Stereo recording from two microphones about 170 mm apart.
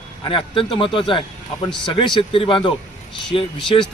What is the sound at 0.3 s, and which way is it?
A man's voice, 30° left (ahead or behind).